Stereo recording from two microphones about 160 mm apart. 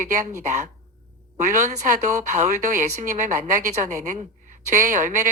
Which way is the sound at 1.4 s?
50° right (ahead or behind).